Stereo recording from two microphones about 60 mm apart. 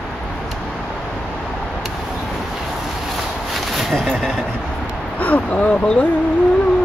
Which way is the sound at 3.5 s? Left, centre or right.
Centre.